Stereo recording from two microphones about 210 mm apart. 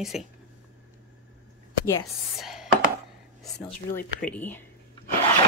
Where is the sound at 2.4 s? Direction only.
Centre (ahead or behind).